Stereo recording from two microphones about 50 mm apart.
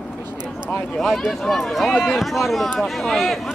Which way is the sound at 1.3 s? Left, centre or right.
Centre.